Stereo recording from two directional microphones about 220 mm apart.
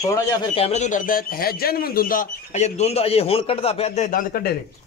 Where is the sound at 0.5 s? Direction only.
30° left (ahead or behind).